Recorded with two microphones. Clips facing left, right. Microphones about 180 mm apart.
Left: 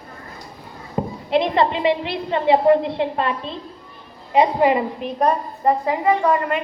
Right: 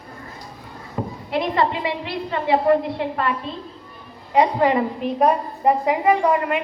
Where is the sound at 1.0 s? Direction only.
25° left (ahead or behind).